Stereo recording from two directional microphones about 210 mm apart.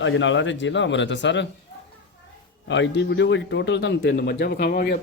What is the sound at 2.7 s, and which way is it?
A man's voice, 55° left (ahead or behind).